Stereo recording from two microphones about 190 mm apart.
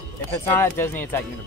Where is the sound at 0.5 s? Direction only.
10° left (ahead or behind).